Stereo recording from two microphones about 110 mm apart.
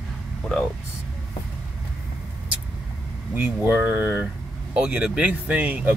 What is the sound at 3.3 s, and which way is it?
Speech, 20° right (ahead or behind).